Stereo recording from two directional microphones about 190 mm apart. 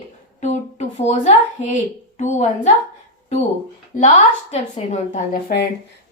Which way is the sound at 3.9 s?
40° left (ahead or behind).